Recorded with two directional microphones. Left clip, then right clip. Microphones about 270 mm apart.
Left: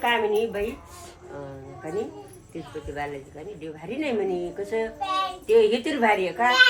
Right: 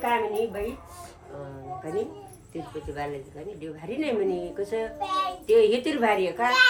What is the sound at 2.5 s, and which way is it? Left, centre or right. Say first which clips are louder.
A woman's voice: left 1 dB; centre.